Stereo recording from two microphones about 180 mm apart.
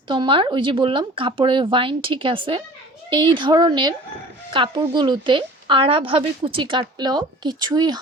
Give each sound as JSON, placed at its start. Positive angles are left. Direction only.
{"t": 0.1, "sound": "a woman's voice", "side_deg": -25}